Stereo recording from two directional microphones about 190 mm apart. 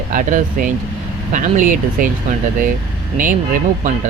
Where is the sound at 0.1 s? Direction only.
45° right (ahead or behind).